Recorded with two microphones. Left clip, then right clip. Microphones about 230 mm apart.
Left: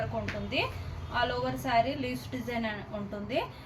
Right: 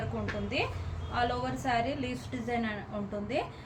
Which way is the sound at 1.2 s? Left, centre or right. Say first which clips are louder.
Left 1 dB; centre.